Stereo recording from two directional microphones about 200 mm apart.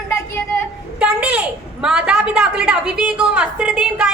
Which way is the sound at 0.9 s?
5° right (ahead or behind).